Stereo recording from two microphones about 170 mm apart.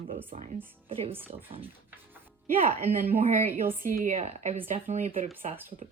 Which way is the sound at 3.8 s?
45° right (ahead or behind).